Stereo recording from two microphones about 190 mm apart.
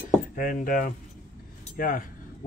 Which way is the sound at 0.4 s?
45° left (ahead or behind).